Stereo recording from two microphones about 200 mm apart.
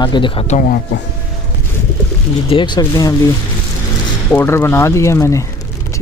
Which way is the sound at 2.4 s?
25° left (ahead or behind).